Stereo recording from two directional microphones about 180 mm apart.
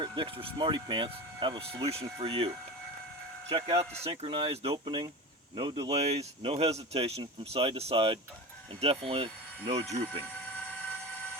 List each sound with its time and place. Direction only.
0.0 s speech: 30° right (ahead or behind)
3.5 s speech: 30° right (ahead or behind)